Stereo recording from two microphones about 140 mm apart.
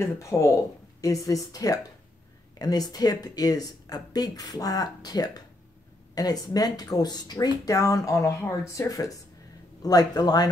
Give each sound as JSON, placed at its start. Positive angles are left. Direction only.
{"t": 0.0, "sound": "speech", "side_deg": 20}